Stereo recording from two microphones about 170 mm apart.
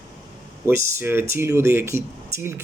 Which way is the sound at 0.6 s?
15° right (ahead or behind).